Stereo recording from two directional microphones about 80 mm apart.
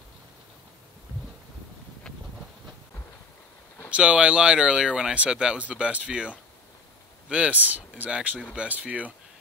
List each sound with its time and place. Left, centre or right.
3.9 s speech: centre